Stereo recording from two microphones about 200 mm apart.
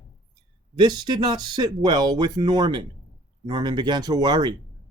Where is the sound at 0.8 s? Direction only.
20° right (ahead or behind).